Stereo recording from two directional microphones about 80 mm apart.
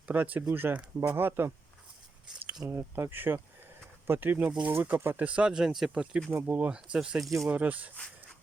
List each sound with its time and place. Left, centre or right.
0.1 s speech: right
2.6 s speech: right
5.2 s speech: centre
6.3 s speech: right